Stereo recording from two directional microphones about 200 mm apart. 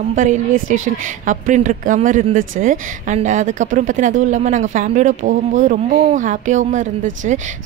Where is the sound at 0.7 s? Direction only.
85° right.